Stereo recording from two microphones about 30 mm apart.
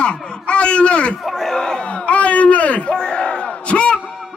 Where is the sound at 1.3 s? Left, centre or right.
Centre.